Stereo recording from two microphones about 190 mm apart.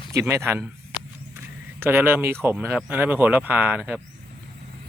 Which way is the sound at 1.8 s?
10° right (ahead or behind).